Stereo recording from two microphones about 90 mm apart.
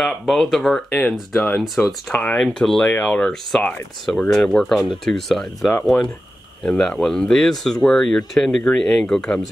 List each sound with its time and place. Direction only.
0.0 s speech: 5° left (ahead or behind)